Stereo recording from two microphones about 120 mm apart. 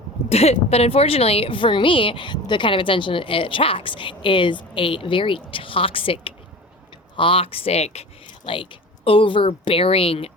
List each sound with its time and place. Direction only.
0.3 s a woman's voice: 60° left (ahead or behind)
8.4 s a woman's voice: 45° left (ahead or behind)